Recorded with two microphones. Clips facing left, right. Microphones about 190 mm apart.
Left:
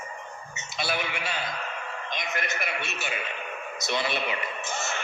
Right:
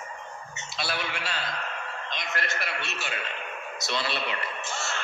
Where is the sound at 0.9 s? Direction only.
10° left (ahead or behind).